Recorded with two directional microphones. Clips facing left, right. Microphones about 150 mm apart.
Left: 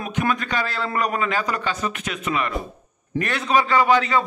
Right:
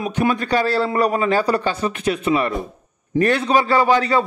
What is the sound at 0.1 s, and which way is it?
A man's voice, 35° right (ahead or behind).